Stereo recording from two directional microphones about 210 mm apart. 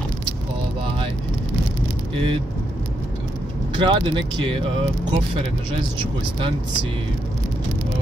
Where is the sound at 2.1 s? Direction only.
25° right (ahead or behind).